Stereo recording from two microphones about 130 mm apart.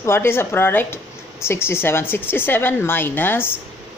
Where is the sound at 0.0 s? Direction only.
20° left (ahead or behind).